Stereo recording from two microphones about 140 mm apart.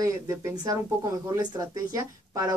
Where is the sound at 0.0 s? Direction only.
20° right (ahead or behind).